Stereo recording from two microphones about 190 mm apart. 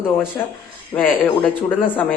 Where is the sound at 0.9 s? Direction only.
10° left (ahead or behind).